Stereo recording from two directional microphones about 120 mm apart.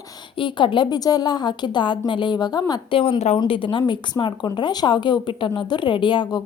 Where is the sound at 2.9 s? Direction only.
50° left (ahead or behind).